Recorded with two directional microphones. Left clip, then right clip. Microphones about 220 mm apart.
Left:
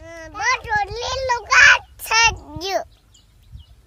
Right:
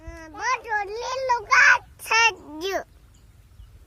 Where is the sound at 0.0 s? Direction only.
40° left (ahead or behind).